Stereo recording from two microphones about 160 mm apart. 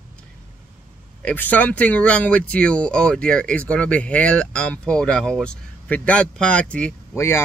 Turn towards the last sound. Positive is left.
turn(degrees=15)  # may be behind; listen again after turning